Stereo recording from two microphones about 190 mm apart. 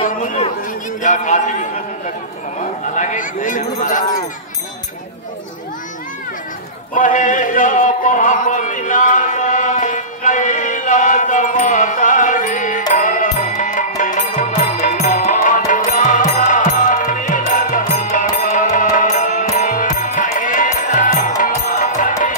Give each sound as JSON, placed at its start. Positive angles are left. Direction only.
{"t": 0.0, "sound": "chatter", "side_deg": 40}
{"t": 3.0, "sound": "speech", "side_deg": 40}
{"t": 6.9, "sound": "a sound", "side_deg": 40}
{"t": 18.1, "sound": "music", "side_deg": 40}